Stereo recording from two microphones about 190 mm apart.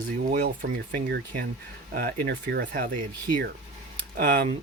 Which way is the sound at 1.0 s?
60° right (ahead or behind).